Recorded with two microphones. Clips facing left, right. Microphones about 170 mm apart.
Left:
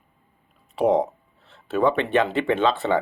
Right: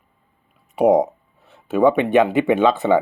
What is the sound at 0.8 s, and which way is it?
Speech, 15° right (ahead or behind).